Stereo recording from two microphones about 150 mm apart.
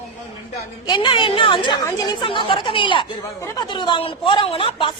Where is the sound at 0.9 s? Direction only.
30° left (ahead or behind).